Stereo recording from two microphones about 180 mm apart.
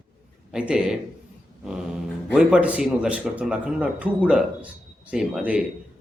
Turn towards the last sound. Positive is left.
turn(degrees=-5)  # may be behind; listen again after turning